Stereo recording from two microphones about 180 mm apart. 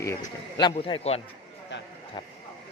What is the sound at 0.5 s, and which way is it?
Speech, 25° left (ahead or behind).